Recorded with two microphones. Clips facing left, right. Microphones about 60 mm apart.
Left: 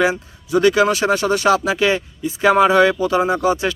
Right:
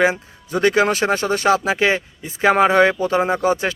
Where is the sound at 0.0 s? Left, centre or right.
Right.